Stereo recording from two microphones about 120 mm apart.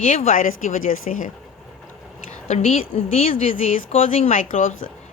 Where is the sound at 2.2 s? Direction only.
80° left.